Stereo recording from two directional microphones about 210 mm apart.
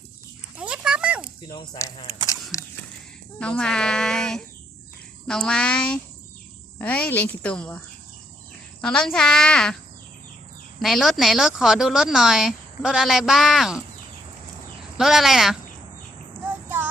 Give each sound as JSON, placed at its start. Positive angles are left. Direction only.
{"t": 0.6, "sound": "a sound", "side_deg": -5}
{"t": 1.5, "sound": "speech", "side_deg": 20}
{"t": 3.4, "sound": "a woman's voice", "side_deg": 5}
{"t": 8.8, "sound": "a woman's voice", "side_deg": 5}
{"t": 10.8, "sound": "a woman's voice", "side_deg": 0}
{"t": 14.9, "sound": "a woman's voice", "side_deg": 0}
{"t": 16.6, "sound": "music", "side_deg": -10}